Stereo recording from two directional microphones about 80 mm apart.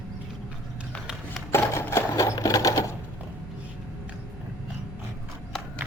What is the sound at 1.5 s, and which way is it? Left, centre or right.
Sewing machine, left.